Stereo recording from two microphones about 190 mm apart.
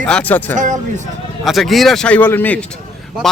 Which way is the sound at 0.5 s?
40° right (ahead or behind).